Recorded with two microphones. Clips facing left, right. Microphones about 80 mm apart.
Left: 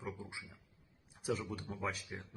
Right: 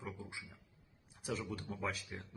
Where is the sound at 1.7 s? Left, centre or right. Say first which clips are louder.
Left 1 dB; centre.